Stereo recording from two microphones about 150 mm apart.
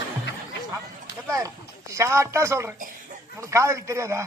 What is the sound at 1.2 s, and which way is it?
Speech, 20° right (ahead or behind).